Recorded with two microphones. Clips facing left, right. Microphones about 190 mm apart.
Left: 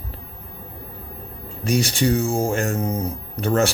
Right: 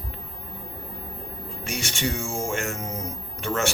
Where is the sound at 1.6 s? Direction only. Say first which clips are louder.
Left 10 dB; 35° left (ahead or behind).